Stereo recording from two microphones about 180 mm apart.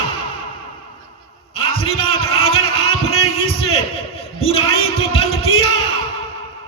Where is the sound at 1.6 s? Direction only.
30° left (ahead or behind).